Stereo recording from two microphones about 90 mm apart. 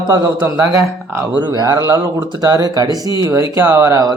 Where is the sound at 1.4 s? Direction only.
55° right (ahead or behind).